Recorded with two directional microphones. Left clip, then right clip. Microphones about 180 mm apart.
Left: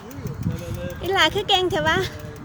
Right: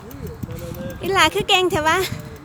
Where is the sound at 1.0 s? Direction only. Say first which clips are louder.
Right 3 dB; 20° right (ahead or behind).